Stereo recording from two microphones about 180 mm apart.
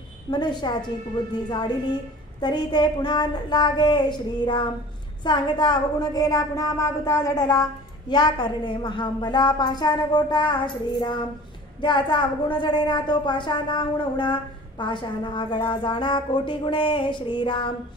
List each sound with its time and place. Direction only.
0.3 s a woman's voice: 25° left (ahead or behind)